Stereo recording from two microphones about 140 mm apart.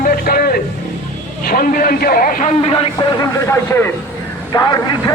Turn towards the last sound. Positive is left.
turn(degrees=25)  # may be behind; listen again after turning